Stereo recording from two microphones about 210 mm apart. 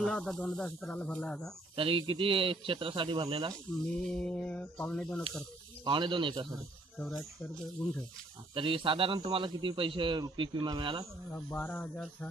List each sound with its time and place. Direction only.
0.0 s speech: centre (ahead or behind)
1.8 s a man's voice: 25° right (ahead or behind)
3.8 s speech: 5° left (ahead or behind)
5.9 s a man's voice: 25° right (ahead or behind)
7.0 s speech: centre (ahead or behind)
8.5 s a man's voice: 25° right (ahead or behind)
11.3 s speech: 10° left (ahead or behind)